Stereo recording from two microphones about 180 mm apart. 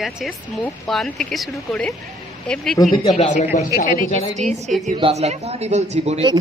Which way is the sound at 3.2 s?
40° left (ahead or behind).